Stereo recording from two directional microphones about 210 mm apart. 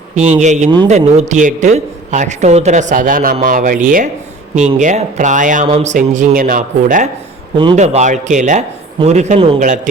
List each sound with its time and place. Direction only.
0.2 s a man's voice: 35° right (ahead or behind)
7.6 s a man's voice: 30° right (ahead or behind)